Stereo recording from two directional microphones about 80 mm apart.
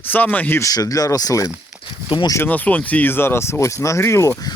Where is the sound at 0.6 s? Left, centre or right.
Left.